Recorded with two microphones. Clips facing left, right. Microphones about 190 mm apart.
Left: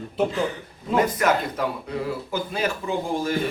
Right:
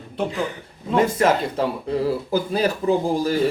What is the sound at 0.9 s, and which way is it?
Speech, 25° right (ahead or behind).